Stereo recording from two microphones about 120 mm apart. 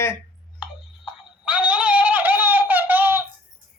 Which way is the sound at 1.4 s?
10° right (ahead or behind).